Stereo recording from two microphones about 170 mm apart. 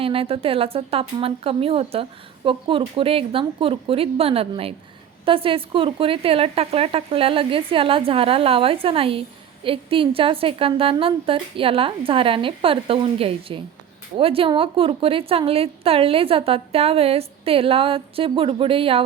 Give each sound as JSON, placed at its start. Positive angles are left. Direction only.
{"t": 0.0, "sound": "a woman's voice", "side_deg": -35}